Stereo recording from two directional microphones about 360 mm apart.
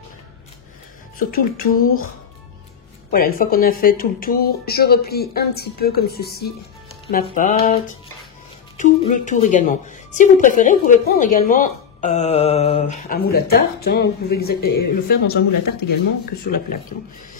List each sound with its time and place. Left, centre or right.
1.1 s a woman's voice: left
3.1 s a woman's voice: left
14.5 s speech: left
14.8 s a woman's voice: left
16.4 s a woman's voice: left